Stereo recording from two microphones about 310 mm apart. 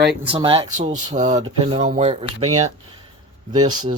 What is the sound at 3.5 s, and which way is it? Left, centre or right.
Speech, centre.